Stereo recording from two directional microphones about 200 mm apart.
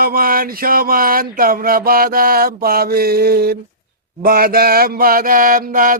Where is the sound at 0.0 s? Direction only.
45° right (ahead or behind).